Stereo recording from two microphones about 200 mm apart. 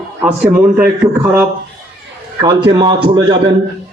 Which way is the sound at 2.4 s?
20° right (ahead or behind).